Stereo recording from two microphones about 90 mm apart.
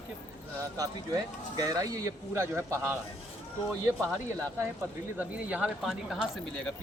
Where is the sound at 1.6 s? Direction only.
40° right (ahead or behind).